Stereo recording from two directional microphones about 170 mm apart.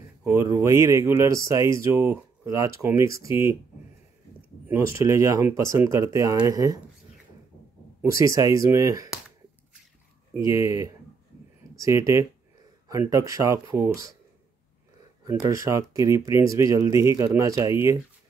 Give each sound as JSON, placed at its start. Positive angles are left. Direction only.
{"t": 0.2, "sound": "speech", "side_deg": -20}
{"t": 4.6, "sound": "speech", "side_deg": -15}
{"t": 8.0, "sound": "speech", "side_deg": -20}
{"t": 10.3, "sound": "speech", "side_deg": -20}
{"t": 15.2, "sound": "speech", "side_deg": -20}